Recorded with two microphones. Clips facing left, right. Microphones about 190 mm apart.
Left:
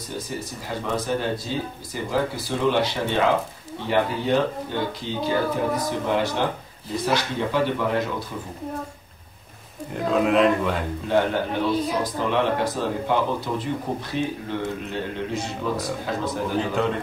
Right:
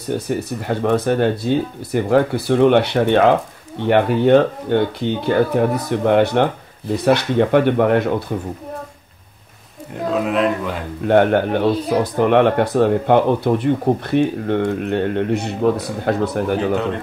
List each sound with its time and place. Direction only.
0.1 s speech: 65° right (ahead or behind)
10.2 s speech: centre (ahead or behind)
11.1 s speech: 60° right (ahead or behind)